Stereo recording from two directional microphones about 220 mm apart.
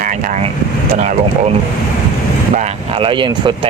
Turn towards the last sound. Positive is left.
turn(degrees=-20)  # may be behind; listen again after turning